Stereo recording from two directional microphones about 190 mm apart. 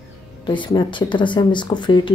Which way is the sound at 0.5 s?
25° left (ahead or behind).